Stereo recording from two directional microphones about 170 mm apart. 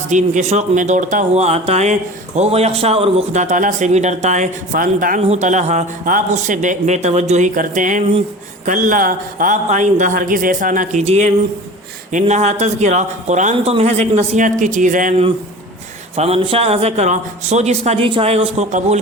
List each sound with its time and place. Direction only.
0.1 s speech: 45° right (ahead or behind)
5.2 s speech: 40° right (ahead or behind)
11.0 s a man's voice: 40° right (ahead or behind)
16.1 s a man's voice: 35° right (ahead or behind)